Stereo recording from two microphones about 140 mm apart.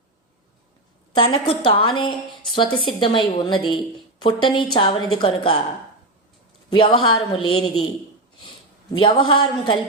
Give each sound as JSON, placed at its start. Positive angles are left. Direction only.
{"t": 1.1, "sound": "a woman's voice", "side_deg": 40}
{"t": 6.7, "sound": "a woman's voice", "side_deg": 35}
{"t": 9.0, "sound": "a woman's voice", "side_deg": 35}